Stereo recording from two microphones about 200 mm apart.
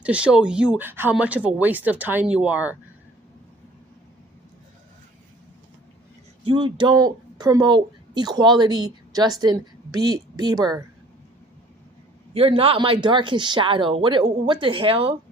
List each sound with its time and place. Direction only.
0.0 s speech: 5° right (ahead or behind)
6.4 s a woman's voice: 25° right (ahead or behind)
12.3 s speech: 30° right (ahead or behind)